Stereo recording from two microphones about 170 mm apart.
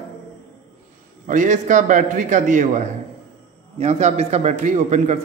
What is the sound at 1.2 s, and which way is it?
A man's voice, 45° right (ahead or behind).